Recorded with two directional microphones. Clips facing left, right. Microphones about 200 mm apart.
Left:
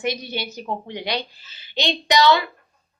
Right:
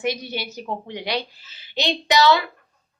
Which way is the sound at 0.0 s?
5° right (ahead or behind).